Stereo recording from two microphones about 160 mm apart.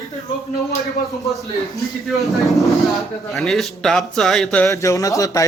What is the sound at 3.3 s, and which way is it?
A man's voice, centre (ahead or behind).